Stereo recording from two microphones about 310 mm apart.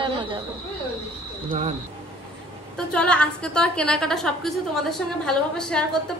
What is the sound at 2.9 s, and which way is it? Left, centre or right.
A woman's voice, centre.